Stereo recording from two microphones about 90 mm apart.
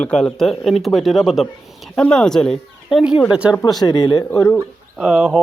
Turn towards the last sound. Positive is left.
turn(degrees=0)  # may be behind; listen again after turning